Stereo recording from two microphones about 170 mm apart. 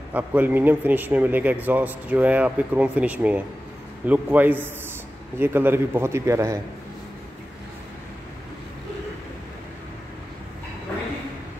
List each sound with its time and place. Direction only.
0.1 s a man's voice: 10° right (ahead or behind)